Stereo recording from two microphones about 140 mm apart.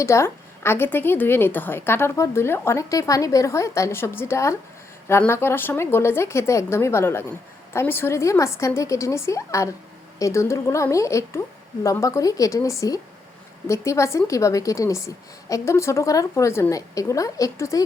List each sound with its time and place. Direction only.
0.0 s a woman's voice: 20° left (ahead or behind)